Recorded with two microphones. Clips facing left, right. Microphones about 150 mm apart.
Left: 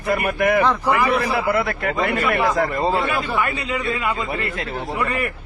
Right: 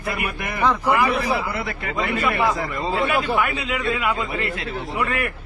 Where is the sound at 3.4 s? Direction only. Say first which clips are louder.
Even; centre (ahead or behind).